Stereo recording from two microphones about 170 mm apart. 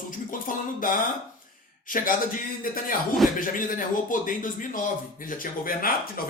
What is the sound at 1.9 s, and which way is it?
Speech, 55° left (ahead or behind).